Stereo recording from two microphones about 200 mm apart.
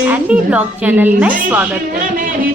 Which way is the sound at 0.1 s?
5° right (ahead or behind).